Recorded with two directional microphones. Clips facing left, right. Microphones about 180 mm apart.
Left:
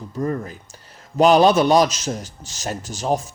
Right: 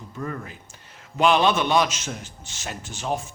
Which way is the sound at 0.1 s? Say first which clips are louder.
Left 8 dB; 40° left (ahead or behind).